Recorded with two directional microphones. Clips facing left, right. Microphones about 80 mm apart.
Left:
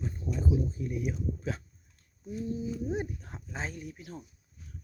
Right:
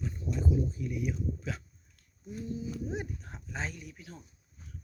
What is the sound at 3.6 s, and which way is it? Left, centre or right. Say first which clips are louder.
Speech: left 1 dB; left.